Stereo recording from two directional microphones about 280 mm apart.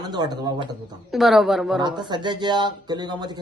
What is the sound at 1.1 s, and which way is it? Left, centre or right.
Speech, centre.